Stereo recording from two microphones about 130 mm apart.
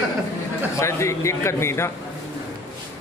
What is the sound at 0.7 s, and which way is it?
A man's voice, 20° left (ahead or behind).